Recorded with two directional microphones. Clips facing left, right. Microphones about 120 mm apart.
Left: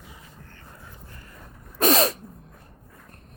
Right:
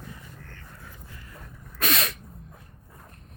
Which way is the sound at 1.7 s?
35° left (ahead or behind).